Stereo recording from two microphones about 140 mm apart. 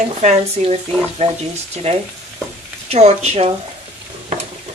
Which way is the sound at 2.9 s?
50° right (ahead or behind).